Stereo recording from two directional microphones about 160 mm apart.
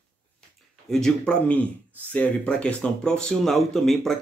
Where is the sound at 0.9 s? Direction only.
5° left (ahead or behind).